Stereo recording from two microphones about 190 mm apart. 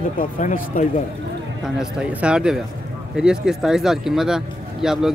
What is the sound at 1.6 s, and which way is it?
Speech, 5° right (ahead or behind).